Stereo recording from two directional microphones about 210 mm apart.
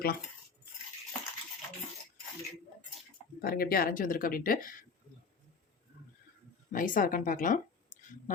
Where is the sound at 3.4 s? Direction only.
45° left (ahead or behind).